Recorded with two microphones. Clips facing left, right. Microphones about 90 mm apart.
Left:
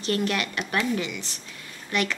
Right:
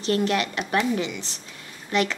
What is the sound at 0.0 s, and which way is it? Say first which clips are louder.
A woman's voice: right 3 dB; 20° right (ahead or behind).